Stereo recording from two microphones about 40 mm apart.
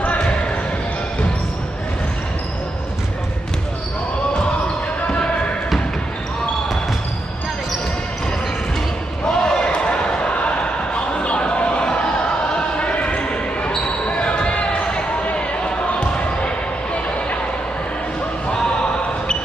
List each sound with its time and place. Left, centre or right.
0.0 s basketball bounce: left
9.3 s basketball bounce: left
11.1 s a sound: left
14.0 s basketball bounce: left